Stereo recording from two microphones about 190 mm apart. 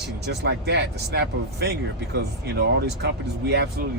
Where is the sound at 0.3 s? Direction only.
60° right (ahead or behind).